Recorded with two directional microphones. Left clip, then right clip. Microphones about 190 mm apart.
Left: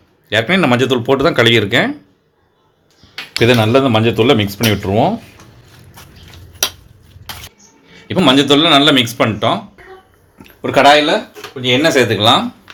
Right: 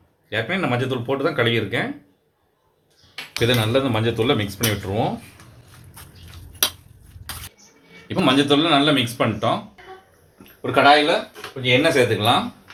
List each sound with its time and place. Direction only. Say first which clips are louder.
0.3 s speech: left 10 dB; 55° left (ahead or behind)
3.4 s speech: left 8 dB; 45° left (ahead or behind)
8.0 s speech: left 7 dB; 35° left (ahead or behind)
10.6 s speech: left 6 dB; 35° left (ahead or behind)
11.6 s speech: left 5 dB; 50° left (ahead or behind)